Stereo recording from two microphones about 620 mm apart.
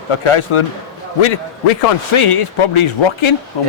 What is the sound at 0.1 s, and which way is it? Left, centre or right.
Speech, left.